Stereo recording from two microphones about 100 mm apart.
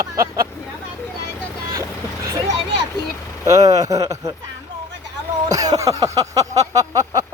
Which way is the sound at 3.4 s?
35° right (ahead or behind).